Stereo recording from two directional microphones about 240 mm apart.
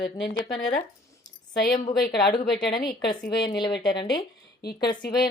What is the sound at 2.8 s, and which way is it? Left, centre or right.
A woman's voice, centre.